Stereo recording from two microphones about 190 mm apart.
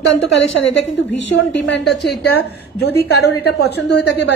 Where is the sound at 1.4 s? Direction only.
70° left (ahead or behind).